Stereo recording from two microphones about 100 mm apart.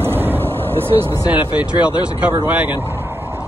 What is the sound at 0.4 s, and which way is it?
Vehicle, 20° left (ahead or behind).